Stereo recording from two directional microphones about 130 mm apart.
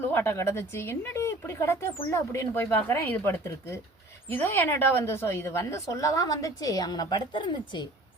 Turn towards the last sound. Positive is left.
turn(degrees=35)  # may be behind; listen again after turning